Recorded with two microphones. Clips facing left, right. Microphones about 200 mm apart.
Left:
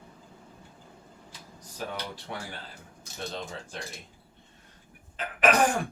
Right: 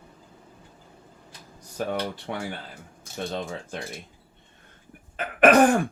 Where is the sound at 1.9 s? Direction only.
60° right (ahead or behind).